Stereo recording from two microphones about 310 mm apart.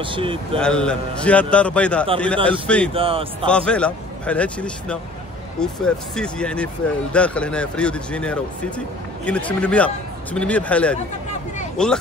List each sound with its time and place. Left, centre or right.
0.0 s speech: centre
0.6 s speech: centre
2.9 s speech: centre
3.4 s speech: centre